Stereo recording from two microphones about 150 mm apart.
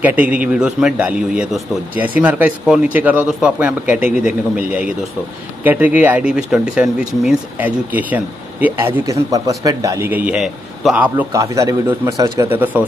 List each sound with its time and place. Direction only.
0.0 s speech: 10° right (ahead or behind)
5.6 s speech: 10° right (ahead or behind)
11.3 s speech: 20° right (ahead or behind)